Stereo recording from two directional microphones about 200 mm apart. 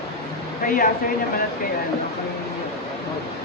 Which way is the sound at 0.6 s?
40° left (ahead or behind).